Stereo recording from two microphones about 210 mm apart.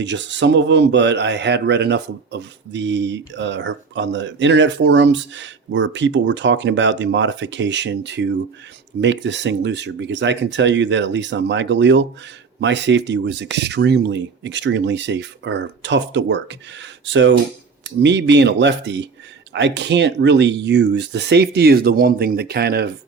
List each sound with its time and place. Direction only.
0.0 s speech: 60° right (ahead or behind)